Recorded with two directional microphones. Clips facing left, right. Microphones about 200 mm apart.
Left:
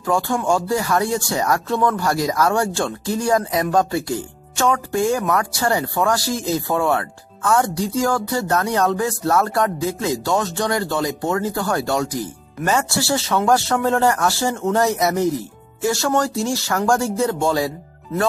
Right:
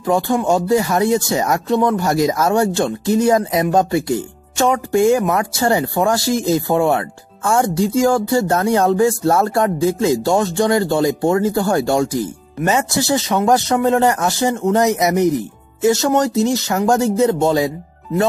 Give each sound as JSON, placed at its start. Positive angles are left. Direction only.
{"t": 0.0, "sound": "speech", "side_deg": -20}